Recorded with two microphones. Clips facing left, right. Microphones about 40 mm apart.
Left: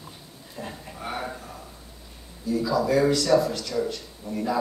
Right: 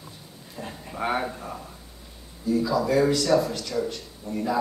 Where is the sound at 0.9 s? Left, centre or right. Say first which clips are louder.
Right 8 dB; right.